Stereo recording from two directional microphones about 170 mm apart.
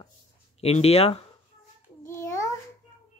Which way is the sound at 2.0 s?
15° left (ahead or behind).